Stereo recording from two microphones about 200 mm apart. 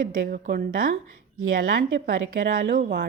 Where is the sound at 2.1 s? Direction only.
45° right (ahead or behind).